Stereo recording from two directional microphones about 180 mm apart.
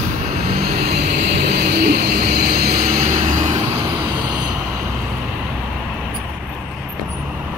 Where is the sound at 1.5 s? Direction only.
60° right (ahead or behind).